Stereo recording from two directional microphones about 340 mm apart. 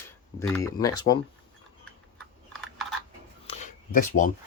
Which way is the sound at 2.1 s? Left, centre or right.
Centre.